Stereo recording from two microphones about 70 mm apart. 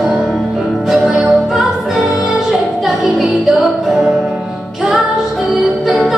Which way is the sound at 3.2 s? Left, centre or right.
Centre.